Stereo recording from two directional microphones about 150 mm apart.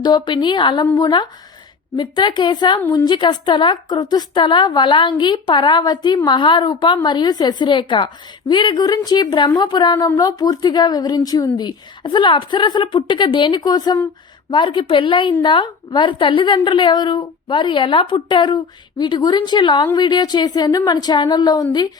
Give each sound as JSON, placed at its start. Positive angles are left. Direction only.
{"t": 0.0, "sound": "a woman's voice", "side_deg": 30}